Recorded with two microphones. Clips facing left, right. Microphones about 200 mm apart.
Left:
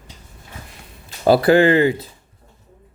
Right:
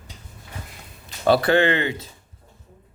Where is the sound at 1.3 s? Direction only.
35° left (ahead or behind).